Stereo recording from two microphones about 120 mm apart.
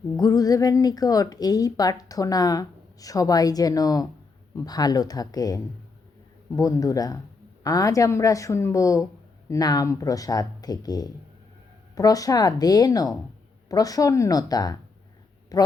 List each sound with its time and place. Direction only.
0.2 s a woman's voice: 30° left (ahead or behind)
6.6 s a woman's voice: 30° left (ahead or behind)